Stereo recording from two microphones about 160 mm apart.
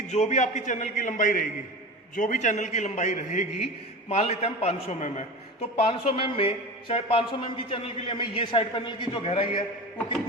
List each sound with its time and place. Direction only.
0.1 s a man's voice: 45° left (ahead or behind)
5.7 s a man's voice: 35° left (ahead or behind)